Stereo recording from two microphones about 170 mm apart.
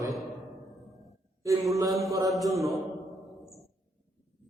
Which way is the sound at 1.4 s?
20° right (ahead or behind).